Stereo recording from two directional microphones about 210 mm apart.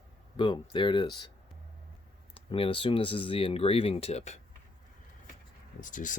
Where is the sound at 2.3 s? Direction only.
25° left (ahead or behind).